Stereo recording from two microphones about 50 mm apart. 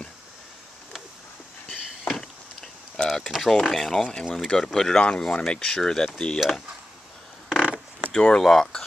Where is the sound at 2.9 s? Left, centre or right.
Centre.